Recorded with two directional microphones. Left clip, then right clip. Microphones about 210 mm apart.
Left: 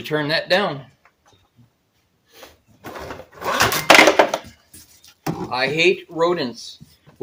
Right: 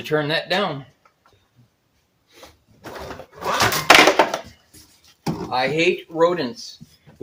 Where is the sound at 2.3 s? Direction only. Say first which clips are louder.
Left 2 dB; 50° left (ahead or behind).